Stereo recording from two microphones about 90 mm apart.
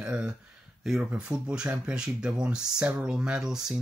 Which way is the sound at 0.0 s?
10° right (ahead or behind).